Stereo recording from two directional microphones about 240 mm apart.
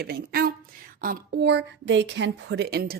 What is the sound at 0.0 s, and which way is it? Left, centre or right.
A woman's voice, right.